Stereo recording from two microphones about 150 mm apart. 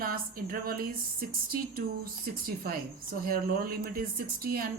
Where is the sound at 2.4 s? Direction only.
75° right (ahead or behind).